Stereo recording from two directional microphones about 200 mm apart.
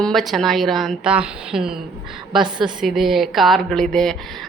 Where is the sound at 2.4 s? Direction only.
25° right (ahead or behind).